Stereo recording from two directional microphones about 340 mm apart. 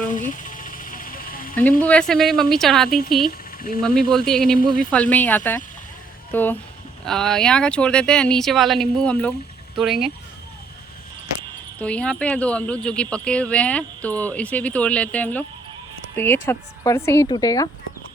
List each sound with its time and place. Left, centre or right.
0.1 s vehicle: left
1.8 s speech: centre
3.2 s a sound: left
3.8 s speech: centre
11.8 s speech: centre